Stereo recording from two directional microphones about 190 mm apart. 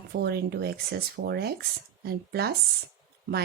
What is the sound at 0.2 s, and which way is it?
Speech, 55° right (ahead or behind).